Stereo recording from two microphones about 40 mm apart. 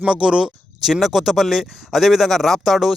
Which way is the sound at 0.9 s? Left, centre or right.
Centre.